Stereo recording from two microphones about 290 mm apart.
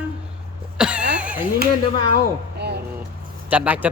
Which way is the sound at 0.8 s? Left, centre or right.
Centre.